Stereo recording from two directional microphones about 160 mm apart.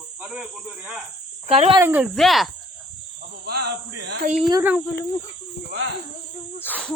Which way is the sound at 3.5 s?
85° right.